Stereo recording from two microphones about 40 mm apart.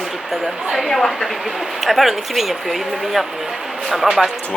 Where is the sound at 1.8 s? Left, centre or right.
Centre.